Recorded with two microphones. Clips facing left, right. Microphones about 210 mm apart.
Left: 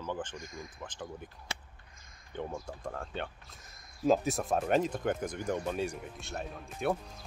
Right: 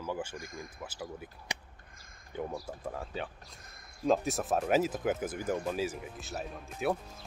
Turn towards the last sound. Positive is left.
turn(degrees=0)  # may be behind; listen again after turning